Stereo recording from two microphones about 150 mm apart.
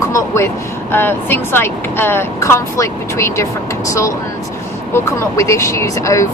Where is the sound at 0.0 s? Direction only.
20° left (ahead or behind).